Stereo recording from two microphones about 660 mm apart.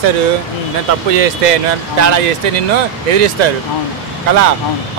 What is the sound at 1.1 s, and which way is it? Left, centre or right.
Speech, right.